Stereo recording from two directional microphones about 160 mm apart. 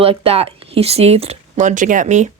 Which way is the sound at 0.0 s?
35° right (ahead or behind).